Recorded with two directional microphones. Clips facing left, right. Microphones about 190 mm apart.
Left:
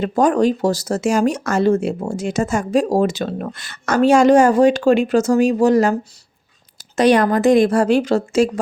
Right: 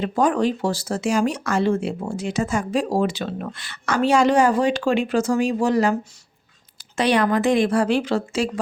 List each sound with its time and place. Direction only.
0.0 s speech: 45° left (ahead or behind)